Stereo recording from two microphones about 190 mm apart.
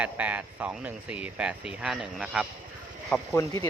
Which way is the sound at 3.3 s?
15° left (ahead or behind).